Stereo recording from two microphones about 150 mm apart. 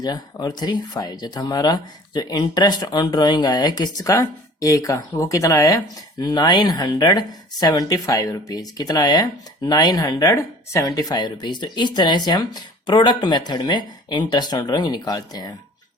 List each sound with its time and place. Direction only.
0.0 s speech: 25° left (ahead or behind)